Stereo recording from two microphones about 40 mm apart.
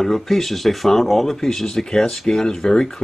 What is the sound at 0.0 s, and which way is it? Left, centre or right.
Speech, centre.